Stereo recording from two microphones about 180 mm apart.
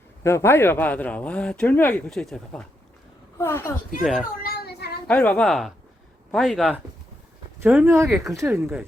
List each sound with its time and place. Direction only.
0.2 s speech: 15° left (ahead or behind)
4.0 s a woman's voice: centre (ahead or behind)
4.4 s child singing: 60° left (ahead or behind)
5.0 s a woman's voice: 10° left (ahead or behind)
7.7 s speech: 10° right (ahead or behind)